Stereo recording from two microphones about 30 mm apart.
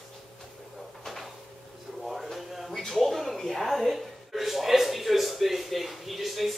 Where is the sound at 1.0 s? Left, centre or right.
Centre.